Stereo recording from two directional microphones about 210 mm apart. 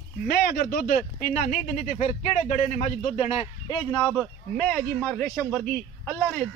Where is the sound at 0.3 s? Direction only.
45° left (ahead or behind); by 4.2 s 20° left (ahead or behind).